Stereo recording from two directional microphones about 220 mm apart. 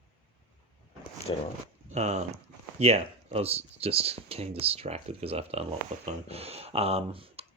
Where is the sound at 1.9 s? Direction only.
30° right (ahead or behind).